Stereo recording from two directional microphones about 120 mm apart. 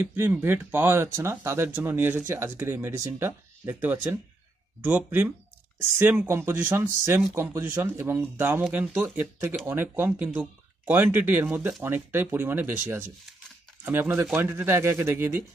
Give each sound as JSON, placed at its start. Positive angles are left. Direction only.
{"t": 0.0, "sound": "speech", "side_deg": -15}